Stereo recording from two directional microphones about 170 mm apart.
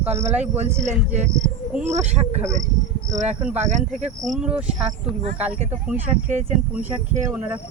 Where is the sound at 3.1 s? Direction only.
45° right (ahead or behind).